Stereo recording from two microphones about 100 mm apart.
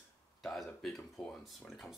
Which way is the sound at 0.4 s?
5° left (ahead or behind).